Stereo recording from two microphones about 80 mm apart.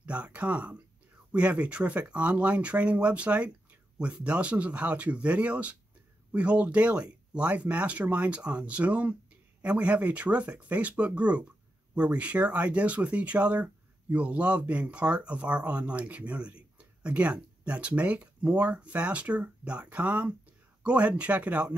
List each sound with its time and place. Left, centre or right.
0.0 s speech: centre